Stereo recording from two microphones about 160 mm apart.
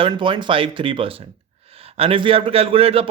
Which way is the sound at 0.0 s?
30° right (ahead or behind).